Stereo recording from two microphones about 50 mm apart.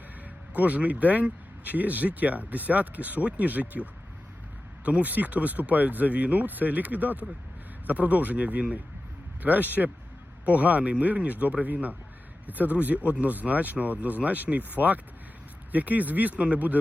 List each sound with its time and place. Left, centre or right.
0.5 s speech: right
4.9 s speech: right